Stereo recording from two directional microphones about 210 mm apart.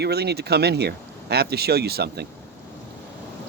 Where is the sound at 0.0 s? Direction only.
50° right (ahead or behind).